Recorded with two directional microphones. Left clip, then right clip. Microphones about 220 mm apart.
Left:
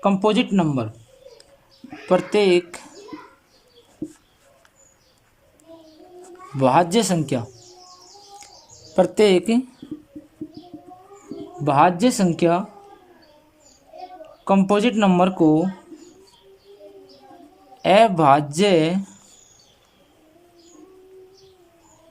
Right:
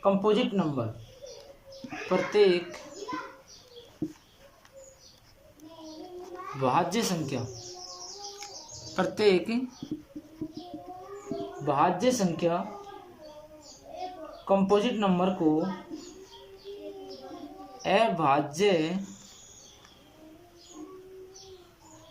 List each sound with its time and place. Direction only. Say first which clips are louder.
0.0 s speech: left 5 dB; 45° left (ahead or behind)
2.0 s speech: left 6 dB; 40° left (ahead or behind)
6.6 s speech: left 10 dB; 40° left (ahead or behind)
9.0 s speech: left 8 dB; 35° left (ahead or behind)
11.6 s speech: left 8 dB; 45° left (ahead or behind)
14.4 s speech: left 6 dB; 50° left (ahead or behind)
17.8 s speech: left 10 dB; 40° left (ahead or behind)